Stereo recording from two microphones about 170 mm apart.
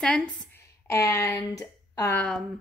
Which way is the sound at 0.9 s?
15° left (ahead or behind).